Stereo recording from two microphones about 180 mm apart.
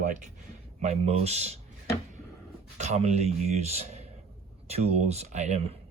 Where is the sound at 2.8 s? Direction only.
40° right (ahead or behind).